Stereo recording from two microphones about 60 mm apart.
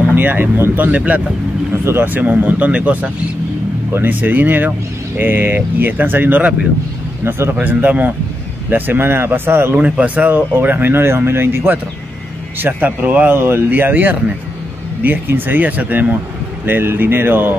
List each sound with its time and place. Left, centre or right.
0.1 s speech: right
1.7 s speech: right
7.2 s speech: right
7.6 s speech: right
9.8 s speech: right
13.4 s speech: right